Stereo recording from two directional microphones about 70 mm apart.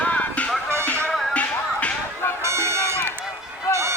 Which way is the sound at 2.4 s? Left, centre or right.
Right.